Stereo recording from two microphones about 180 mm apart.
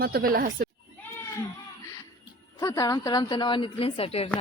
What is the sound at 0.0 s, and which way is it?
Speech, 55° right (ahead or behind).